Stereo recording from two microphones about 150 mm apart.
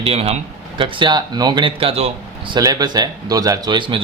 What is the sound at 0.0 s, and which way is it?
Speech, 40° right (ahead or behind).